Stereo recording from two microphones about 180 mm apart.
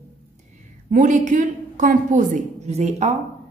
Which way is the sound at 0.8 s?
45° right (ahead or behind).